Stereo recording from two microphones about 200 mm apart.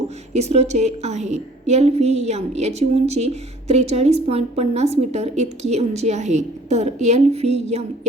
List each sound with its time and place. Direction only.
0.3 s a woman's voice: 35° right (ahead or behind)